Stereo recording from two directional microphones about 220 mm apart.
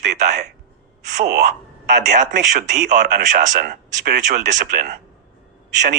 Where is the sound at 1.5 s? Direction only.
35° right (ahead or behind).